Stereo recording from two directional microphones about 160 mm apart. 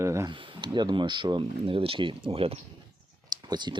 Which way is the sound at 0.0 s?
15° right (ahead or behind).